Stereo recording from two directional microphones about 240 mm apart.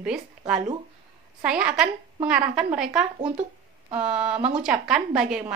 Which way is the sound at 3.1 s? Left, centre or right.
Centre.